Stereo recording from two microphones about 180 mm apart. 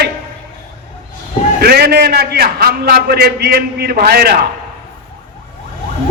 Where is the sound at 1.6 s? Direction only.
60° right (ahead or behind).